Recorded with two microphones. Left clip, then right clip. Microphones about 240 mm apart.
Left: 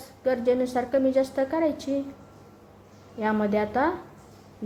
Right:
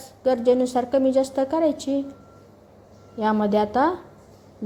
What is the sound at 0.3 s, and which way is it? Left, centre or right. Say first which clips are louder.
A woman's voice: right 4 dB; centre.